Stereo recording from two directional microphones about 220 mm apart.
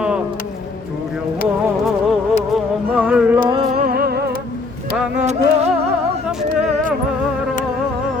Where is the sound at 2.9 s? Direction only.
5° right (ahead or behind).